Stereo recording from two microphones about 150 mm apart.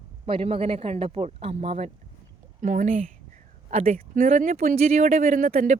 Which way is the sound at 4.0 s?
65° right (ahead or behind).